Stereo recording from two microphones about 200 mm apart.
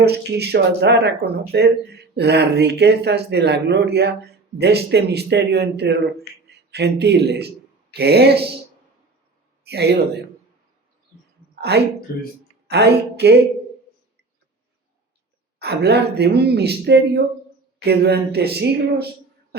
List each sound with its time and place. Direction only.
0.0 s speech: 55° right (ahead or behind)
9.6 s a man's voice: 55° right (ahead or behind)
11.7 s speech: 55° right (ahead or behind)
15.6 s speech: 55° right (ahead or behind)